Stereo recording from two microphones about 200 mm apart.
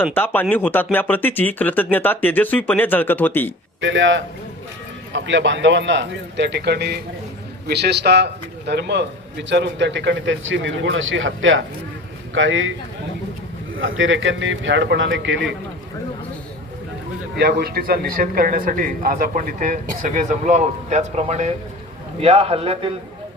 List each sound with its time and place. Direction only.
0.0 s speech: 10° left (ahead or behind)
3.8 s a man's voice: 70° right (ahead or behind)
13.7 s a man's voice: 75° right (ahead or behind)
17.3 s speech: 50° right (ahead or behind); by 22.9 s 30° right (ahead or behind)